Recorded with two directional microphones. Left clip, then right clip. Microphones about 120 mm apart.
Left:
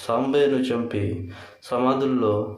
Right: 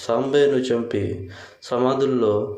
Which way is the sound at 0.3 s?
25° right (ahead or behind).